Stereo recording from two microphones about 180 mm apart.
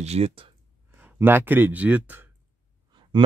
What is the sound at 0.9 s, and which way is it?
Speech, 10° right (ahead or behind).